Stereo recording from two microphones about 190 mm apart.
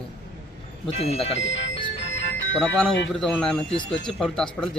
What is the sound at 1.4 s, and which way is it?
Speech, 80° left.